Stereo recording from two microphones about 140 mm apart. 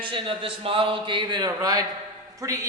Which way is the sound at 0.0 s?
40° right (ahead or behind).